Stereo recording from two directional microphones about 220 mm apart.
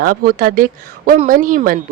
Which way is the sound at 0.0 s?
40° right (ahead or behind).